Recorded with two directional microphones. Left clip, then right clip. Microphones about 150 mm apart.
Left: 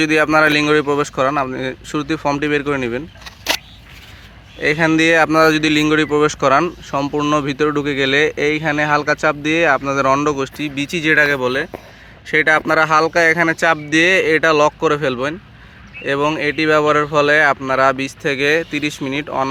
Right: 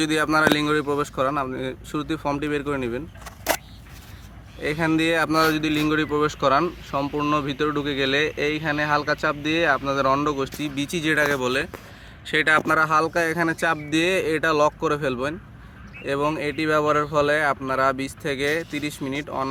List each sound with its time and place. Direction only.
0.0 s speech: 30° left (ahead or behind)
3.2 s single-lens reflex camera: 15° right (ahead or behind)
4.6 s speech: 35° left (ahead or behind)